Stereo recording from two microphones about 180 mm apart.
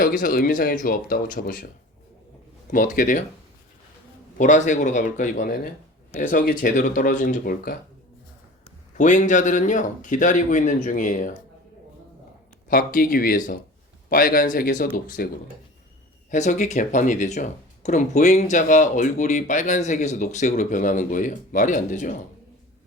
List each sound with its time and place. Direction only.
0.0 s speech: 50° left (ahead or behind)
4.4 s speech: 45° left (ahead or behind)
9.0 s speech: 45° left (ahead or behind)
12.6 s speech: 50° left (ahead or behind)
16.3 s speech: 40° left (ahead or behind)